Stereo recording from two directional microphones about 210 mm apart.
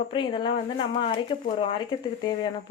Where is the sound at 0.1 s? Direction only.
25° left (ahead or behind).